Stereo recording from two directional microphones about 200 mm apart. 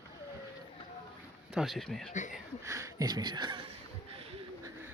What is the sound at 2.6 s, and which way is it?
Speech, 15° right (ahead or behind).